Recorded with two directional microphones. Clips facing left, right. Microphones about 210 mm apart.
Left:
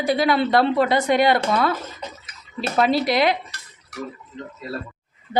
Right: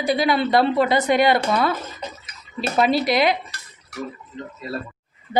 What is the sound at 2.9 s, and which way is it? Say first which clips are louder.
Speech: even; centre (ahead or behind).